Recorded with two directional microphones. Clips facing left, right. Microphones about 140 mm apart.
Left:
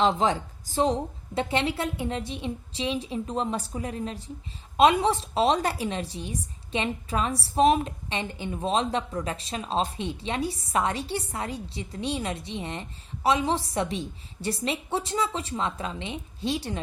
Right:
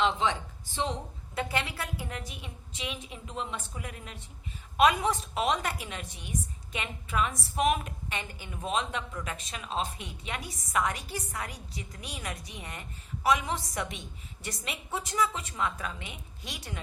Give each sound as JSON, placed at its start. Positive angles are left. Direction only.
{"t": 0.0, "sound": "a woman's voice", "side_deg": 40}